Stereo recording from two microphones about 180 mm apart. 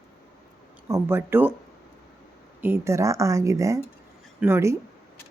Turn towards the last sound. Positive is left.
turn(degrees=-15)  # may be behind; listen again after turning